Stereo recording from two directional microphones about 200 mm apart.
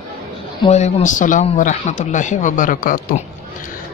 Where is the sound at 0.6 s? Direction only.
30° left (ahead or behind).